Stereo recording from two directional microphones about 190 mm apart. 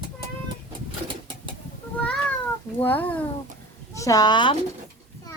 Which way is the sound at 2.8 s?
10° left (ahead or behind).